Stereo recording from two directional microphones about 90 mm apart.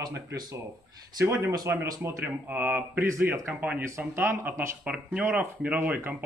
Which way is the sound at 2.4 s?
20° right (ahead or behind).